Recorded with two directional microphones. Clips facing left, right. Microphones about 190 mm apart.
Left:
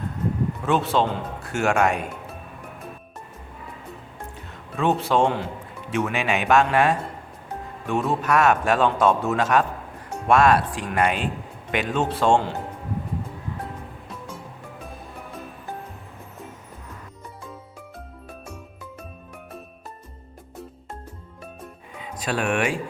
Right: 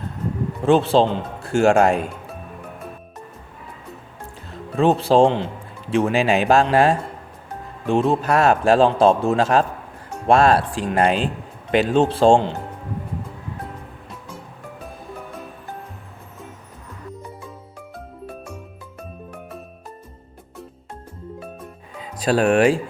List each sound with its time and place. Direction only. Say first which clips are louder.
0.6 s a man's voice: right 7 dB; 30° right (ahead or behind)
4.5 s a man's voice: right 5 dB; 30° right (ahead or behind)
22.0 s speech: right 8 dB; 35° right (ahead or behind)